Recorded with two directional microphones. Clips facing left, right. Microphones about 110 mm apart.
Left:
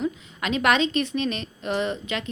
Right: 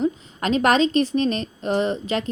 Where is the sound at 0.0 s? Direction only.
35° right (ahead or behind).